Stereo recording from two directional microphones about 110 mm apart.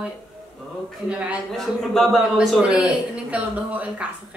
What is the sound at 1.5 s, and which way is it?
A man's voice, centre (ahead or behind).